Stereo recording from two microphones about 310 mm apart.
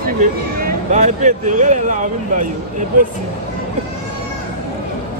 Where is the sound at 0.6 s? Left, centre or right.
Right.